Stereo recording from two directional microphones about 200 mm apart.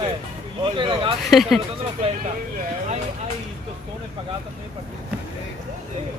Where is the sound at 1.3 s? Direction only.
Centre (ahead or behind).